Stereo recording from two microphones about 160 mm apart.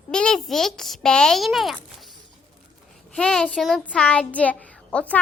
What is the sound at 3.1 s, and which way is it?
A child's voice, 5° left (ahead or behind).